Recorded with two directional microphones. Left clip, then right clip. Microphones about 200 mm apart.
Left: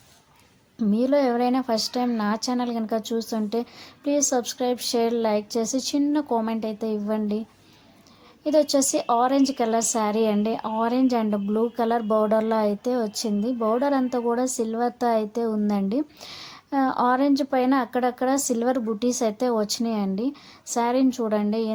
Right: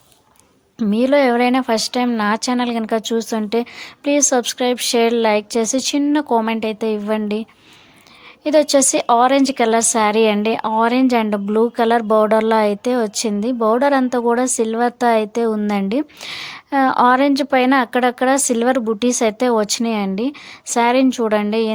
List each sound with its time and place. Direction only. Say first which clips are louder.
0.9 s a woman's voice: right 7 dB; 25° right (ahead or behind)
8.4 s a woman's voice: right 7 dB; 25° right (ahead or behind)